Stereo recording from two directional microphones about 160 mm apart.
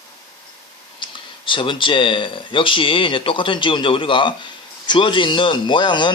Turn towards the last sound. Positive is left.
turn(degrees=30)  # may be behind; listen again after turning